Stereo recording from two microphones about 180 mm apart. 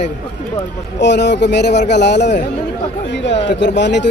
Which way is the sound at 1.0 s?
75° left (ahead or behind).